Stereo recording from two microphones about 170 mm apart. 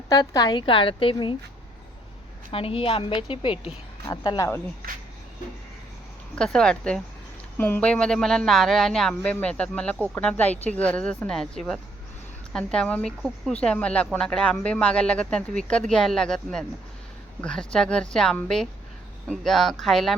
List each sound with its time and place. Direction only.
0.1 s a woman's voice: 20° left (ahead or behind)
2.5 s a woman's voice: 35° left (ahead or behind)
6.3 s speech: 5° left (ahead or behind)